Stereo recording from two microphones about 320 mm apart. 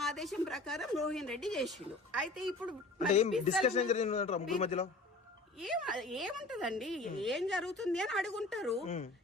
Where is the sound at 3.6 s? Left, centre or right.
Left.